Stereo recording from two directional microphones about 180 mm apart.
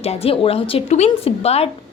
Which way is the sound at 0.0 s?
35° left (ahead or behind).